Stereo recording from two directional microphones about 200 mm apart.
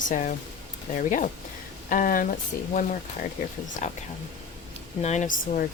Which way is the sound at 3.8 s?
35° left (ahead or behind).